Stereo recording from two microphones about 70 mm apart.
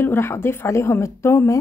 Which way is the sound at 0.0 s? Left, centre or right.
Left.